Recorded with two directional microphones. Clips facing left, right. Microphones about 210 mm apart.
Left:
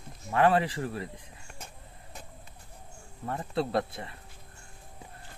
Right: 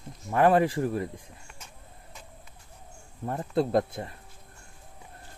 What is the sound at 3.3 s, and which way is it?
Speech, 45° right (ahead or behind).